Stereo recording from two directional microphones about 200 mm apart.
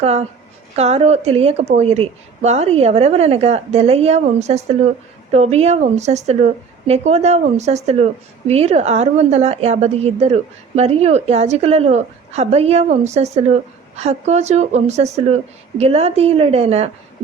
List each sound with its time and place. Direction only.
0.0 s a woman's voice: 30° right (ahead or behind)